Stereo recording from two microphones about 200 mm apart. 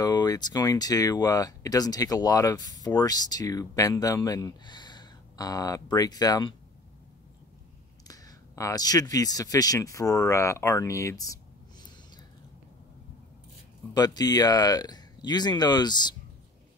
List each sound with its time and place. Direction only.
0.0 s speech: 20° left (ahead or behind)
8.1 s speech: 15° left (ahead or behind)
13.9 s speech: 20° left (ahead or behind)